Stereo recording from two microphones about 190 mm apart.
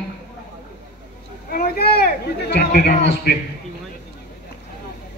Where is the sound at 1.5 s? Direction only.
55° left (ahead or behind).